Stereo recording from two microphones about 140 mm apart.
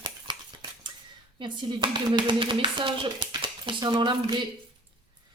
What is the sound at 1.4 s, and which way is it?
Speech, 35° right (ahead or behind).